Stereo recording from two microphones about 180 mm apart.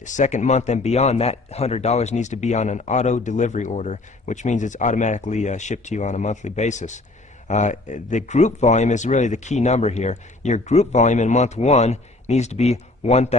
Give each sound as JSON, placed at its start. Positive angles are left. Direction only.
{"t": 0.0, "sound": "a man's voice", "side_deg": 45}